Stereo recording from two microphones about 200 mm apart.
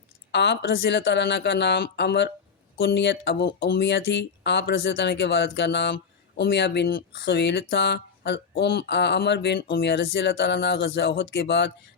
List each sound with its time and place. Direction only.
0.3 s speech: 60° left (ahead or behind)